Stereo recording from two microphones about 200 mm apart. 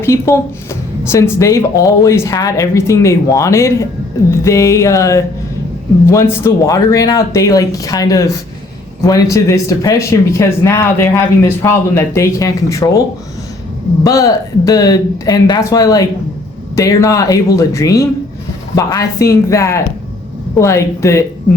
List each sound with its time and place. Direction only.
0.0 s speech: 15° left (ahead or behind)
14.0 s speech: 15° left (ahead or behind)